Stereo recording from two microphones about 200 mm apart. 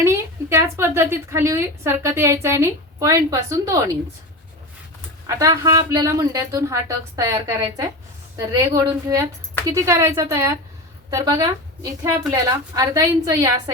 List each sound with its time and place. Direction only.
0.0 s a woman's voice: 15° right (ahead or behind)
5.2 s a woman's voice: 15° right (ahead or behind)